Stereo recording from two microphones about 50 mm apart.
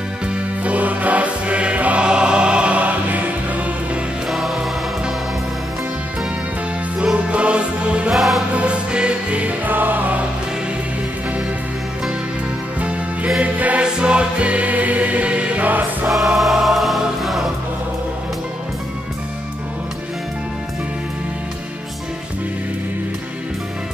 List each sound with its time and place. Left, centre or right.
0.3 s music: right
2.0 s choir: centre
4.3 s music: centre
7.2 s music: right
8.1 s music: centre
8.5 s music: right
9.7 s music: right
13.4 s music: right
16.1 s choir: centre